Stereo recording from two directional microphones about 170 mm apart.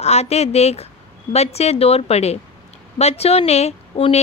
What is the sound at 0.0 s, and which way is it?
Speech, 40° left (ahead or behind).